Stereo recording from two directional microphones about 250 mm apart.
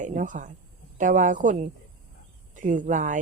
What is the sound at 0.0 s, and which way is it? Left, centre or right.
Speech, right.